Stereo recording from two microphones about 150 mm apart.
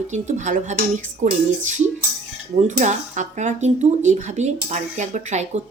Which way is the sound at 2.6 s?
55° right (ahead or behind).